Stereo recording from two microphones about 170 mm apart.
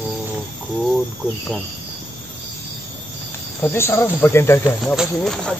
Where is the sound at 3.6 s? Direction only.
15° left (ahead or behind).